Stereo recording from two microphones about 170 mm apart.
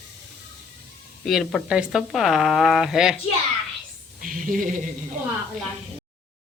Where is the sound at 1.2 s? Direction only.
Centre (ahead or behind).